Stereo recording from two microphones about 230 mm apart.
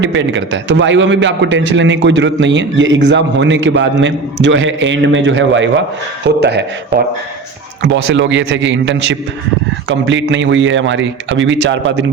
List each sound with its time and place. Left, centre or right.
0.0 s a man's voice: right
7.8 s a man's voice: right